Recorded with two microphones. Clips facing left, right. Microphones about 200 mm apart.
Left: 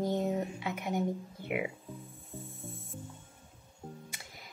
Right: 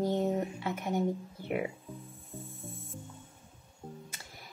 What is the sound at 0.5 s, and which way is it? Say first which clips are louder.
A woman's voice: right 1 dB; 15° left (ahead or behind).